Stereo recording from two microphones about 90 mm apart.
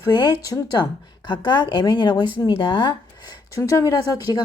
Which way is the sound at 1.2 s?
60° left (ahead or behind).